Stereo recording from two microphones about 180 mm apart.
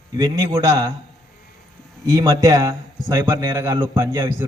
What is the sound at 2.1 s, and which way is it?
A man's voice, 20° right (ahead or behind).